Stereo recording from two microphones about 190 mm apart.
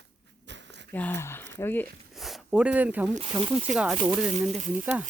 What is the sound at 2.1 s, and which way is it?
Speech, centre (ahead or behind).